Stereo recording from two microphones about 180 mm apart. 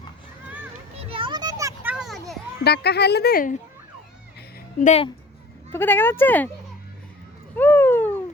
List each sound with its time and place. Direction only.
1.0 s children playing: 30° right (ahead or behind); by 2.4 s centre (ahead or behind)
2.6 s a woman's voice: 65° left (ahead or behind)
4.8 s a woman's voice: 40° left (ahead or behind)
5.7 s speech: 10° left (ahead or behind)
7.5 s a sound: 10° left (ahead or behind)